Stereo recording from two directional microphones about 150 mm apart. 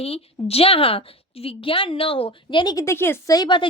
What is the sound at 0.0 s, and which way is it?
A woman's voice, 40° left (ahead or behind).